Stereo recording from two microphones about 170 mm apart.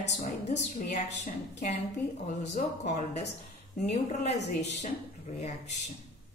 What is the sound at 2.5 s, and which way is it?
A woman's voice, 45° left (ahead or behind).